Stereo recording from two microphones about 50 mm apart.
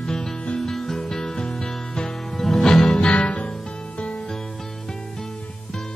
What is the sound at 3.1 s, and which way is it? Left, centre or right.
Music, left.